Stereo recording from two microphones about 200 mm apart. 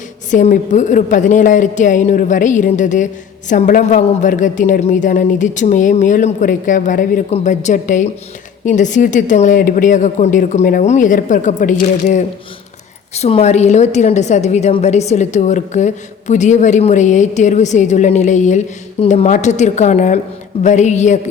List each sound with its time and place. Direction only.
0.3 s a woman's voice: 40° left (ahead or behind)